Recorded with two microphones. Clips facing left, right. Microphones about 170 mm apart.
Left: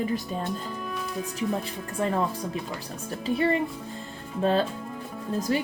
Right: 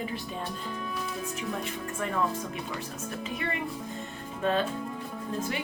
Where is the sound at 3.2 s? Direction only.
35° left (ahead or behind).